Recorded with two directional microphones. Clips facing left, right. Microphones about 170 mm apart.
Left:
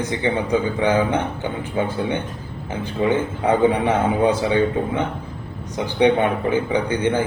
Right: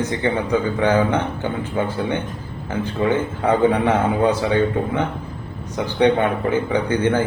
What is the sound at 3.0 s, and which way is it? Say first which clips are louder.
A man's voice: left 1 dB; 15° left (ahead or behind).